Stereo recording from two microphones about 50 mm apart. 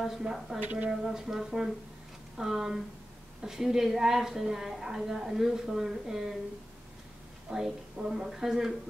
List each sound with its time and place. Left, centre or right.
0.2 s a woman's voice: centre
0.6 s speech: right
0.8 s a woman's voice: centre
7.4 s a woman's voice: centre